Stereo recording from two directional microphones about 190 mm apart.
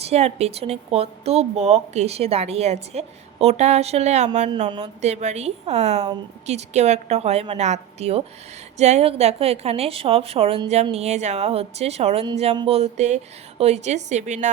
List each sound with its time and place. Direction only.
0.0 s a woman's voice: 35° right (ahead or behind)